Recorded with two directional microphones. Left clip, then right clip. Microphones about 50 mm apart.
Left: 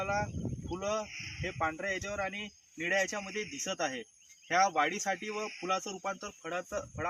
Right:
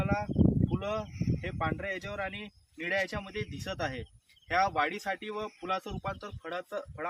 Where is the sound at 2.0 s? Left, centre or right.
Centre.